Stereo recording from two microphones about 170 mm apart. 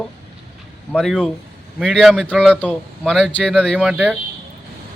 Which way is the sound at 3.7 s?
5° right (ahead or behind).